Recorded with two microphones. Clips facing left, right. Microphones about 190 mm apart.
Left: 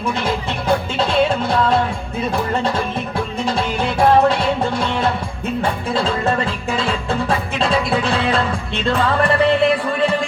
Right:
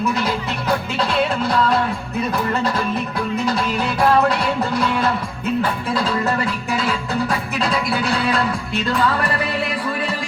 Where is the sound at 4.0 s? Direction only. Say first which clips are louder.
Left 3 dB; 25° left (ahead or behind).